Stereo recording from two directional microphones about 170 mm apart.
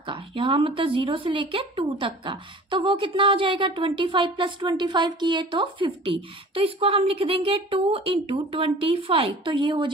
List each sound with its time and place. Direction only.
0.0 s a woman's voice: 30° right (ahead or behind)